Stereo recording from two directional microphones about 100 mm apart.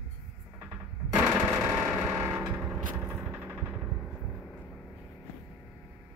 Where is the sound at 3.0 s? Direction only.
15° right (ahead or behind).